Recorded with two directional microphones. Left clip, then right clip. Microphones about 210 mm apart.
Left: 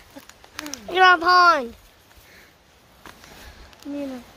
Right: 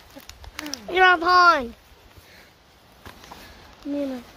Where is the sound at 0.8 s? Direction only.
5° left (ahead or behind).